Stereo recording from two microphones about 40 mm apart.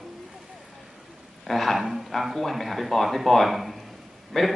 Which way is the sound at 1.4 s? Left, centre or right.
Centre.